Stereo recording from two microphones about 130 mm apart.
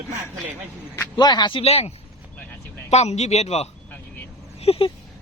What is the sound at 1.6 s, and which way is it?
A man's voice, 50° left (ahead or behind).